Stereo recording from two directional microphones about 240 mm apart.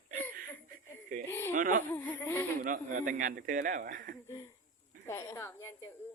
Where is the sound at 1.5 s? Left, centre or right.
Right.